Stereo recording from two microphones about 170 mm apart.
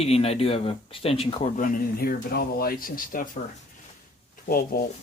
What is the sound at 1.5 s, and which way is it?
Speech, 55° left (ahead or behind).